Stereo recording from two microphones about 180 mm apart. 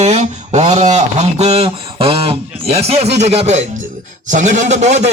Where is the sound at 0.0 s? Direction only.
40° right (ahead or behind).